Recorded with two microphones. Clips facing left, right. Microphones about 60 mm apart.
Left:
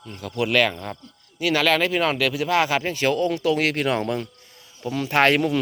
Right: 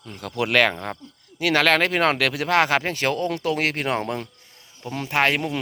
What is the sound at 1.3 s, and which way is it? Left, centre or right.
Speech, right.